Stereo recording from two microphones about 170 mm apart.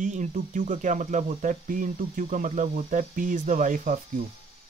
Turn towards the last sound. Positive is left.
turn(degrees=-50)  # may be behind; listen again after turning